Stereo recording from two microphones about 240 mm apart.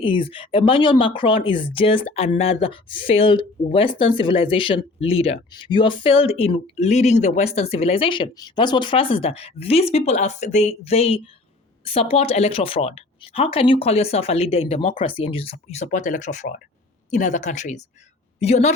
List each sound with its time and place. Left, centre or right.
0.0 s speech: left